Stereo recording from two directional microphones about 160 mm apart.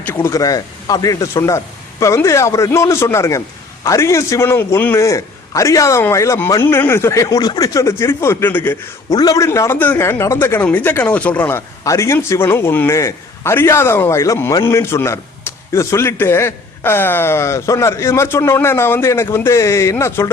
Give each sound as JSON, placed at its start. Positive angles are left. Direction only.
{"t": 0.0, "sound": "a man's voice", "side_deg": 15}